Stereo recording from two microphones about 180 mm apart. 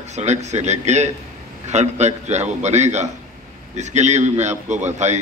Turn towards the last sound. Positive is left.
turn(degrees=-40)  # may be behind; listen again after turning